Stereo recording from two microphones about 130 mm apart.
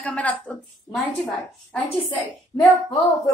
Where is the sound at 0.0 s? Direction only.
10° left (ahead or behind).